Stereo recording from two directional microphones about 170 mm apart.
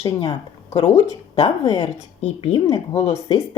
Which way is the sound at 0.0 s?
30° left (ahead or behind).